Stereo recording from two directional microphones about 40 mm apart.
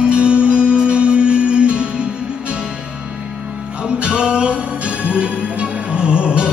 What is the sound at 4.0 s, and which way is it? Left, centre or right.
Music, right.